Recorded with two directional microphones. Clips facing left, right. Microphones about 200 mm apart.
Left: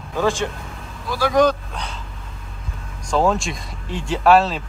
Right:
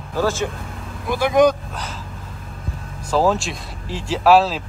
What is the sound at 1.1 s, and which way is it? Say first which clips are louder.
Speech: right 2 dB; 20° right (ahead or behind).